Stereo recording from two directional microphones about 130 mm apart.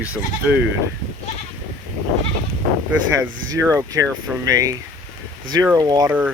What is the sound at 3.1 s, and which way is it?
Speech, 20° right (ahead or behind).